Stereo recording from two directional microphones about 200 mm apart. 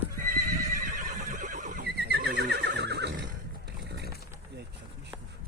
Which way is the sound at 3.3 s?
55° right (ahead or behind).